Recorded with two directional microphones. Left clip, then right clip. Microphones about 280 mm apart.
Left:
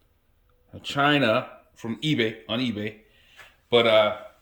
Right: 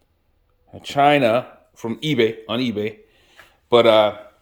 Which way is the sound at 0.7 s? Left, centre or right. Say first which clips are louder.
Right 7 dB; centre.